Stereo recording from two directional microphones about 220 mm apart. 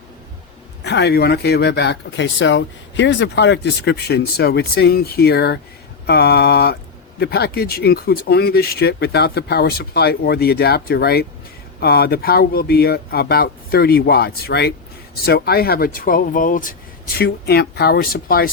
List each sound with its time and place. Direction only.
0.9 s speech: 50° left (ahead or behind)